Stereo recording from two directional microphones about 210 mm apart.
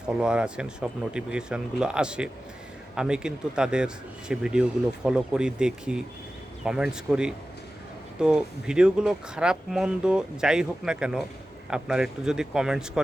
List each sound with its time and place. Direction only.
0.1 s speech: 5° right (ahead or behind)